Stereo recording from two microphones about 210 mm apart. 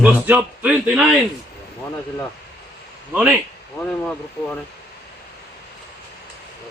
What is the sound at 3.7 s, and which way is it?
Speech, 5° left (ahead or behind).